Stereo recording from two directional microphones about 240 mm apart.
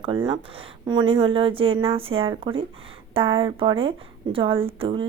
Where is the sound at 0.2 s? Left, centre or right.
Centre.